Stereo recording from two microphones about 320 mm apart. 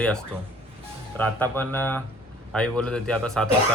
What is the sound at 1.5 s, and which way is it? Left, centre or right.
Speech, centre.